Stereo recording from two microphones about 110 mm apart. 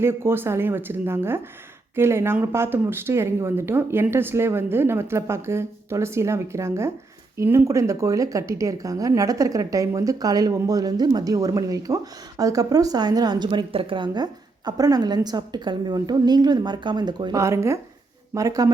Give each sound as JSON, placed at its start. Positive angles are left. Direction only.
{"t": 0.0, "sound": "a woman's voice", "side_deg": -20}
{"t": 17.3, "sound": "a woman's voice", "side_deg": -25}